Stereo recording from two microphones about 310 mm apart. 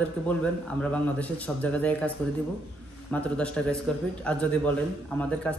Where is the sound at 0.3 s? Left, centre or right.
Centre.